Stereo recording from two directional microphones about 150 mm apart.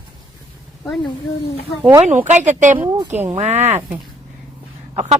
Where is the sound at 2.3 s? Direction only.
55° right (ahead or behind).